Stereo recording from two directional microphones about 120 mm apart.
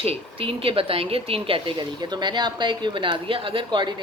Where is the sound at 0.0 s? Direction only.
55° right (ahead or behind).